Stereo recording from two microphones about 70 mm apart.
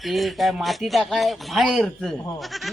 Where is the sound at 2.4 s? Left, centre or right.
Centre.